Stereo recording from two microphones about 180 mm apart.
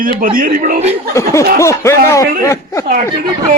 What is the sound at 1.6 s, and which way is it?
A woman's voice, 15° left (ahead or behind).